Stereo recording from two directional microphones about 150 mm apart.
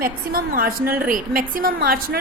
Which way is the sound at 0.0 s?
75° right (ahead or behind).